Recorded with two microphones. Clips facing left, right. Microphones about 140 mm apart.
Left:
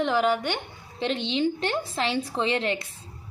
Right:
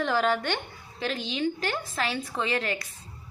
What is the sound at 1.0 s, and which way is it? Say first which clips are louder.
A woman's voice: left 4 dB; 25° left (ahead or behind).